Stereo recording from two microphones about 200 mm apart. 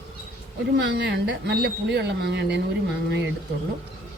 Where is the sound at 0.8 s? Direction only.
60° right (ahead or behind).